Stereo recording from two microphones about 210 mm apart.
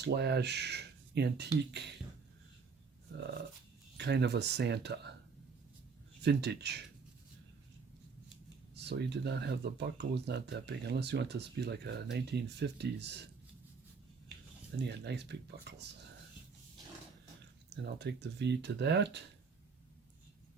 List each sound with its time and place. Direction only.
0.0 s speech: 55° right (ahead or behind)
3.9 s speech: 55° right (ahead or behind)
6.2 s speech: 50° right (ahead or behind)
8.7 s speech: 55° right (ahead or behind)
14.8 s speech: 55° right (ahead or behind)
18.0 s speech: 55° right (ahead or behind)